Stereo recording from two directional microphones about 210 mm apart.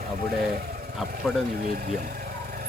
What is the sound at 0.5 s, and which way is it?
Vehicle, 45° right (ahead or behind).